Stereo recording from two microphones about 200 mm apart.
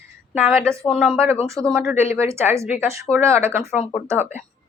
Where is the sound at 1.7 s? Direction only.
10° right (ahead or behind).